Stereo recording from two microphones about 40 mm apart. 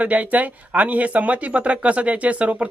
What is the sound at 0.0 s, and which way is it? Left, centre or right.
Speech, right.